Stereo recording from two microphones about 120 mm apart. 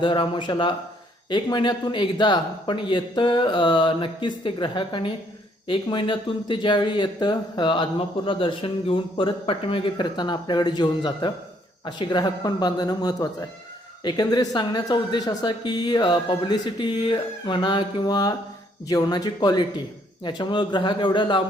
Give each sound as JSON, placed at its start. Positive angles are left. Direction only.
{"t": 0.0, "sound": "speech", "side_deg": 40}